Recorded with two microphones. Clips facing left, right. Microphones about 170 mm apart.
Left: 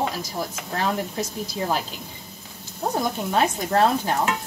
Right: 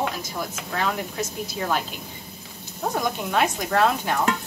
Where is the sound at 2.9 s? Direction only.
35° left (ahead or behind).